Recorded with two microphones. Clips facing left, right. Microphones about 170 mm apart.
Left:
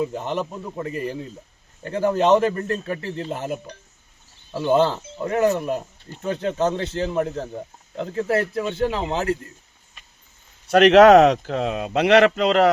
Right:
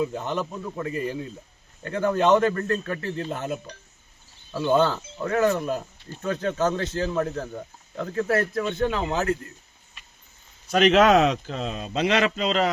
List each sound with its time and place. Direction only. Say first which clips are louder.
0.2 s speech: left 2 dB; 25° left (ahead or behind)
4.8 s speech: left 2 dB; 25° left (ahead or behind)
10.7 s speech: left 6 dB; 65° left (ahead or behind)